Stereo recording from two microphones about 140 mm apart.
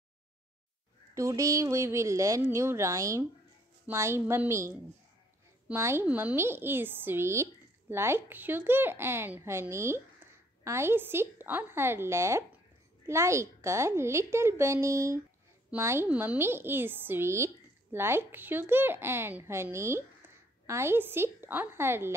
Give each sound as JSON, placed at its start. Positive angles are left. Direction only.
{"t": 1.1, "sound": "a woman's voice", "side_deg": -20}